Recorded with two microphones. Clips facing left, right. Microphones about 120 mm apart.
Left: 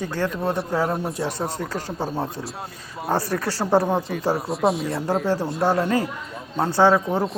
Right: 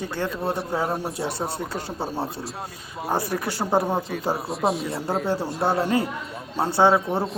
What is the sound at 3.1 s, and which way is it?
Speech, 15° right (ahead or behind).